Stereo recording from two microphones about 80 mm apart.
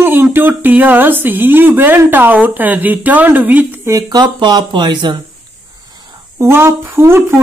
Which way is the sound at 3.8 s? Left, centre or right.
Right.